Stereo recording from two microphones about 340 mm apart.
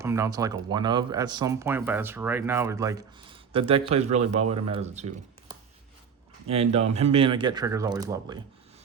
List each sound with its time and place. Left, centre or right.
0.0 s speech: centre